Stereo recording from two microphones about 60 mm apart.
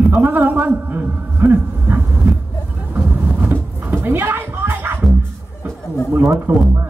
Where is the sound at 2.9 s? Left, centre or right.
Right.